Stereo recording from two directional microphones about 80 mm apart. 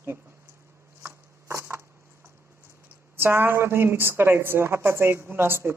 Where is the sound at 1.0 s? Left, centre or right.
Right.